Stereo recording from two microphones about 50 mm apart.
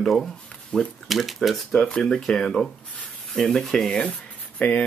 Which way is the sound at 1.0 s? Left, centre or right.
Centre.